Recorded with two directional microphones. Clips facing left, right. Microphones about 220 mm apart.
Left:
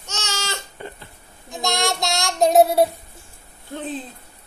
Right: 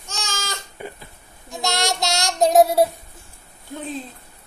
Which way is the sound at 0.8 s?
10° right (ahead or behind).